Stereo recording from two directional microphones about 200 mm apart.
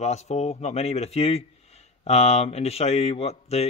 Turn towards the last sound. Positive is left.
turn(degrees=30)  # may be behind; listen again after turning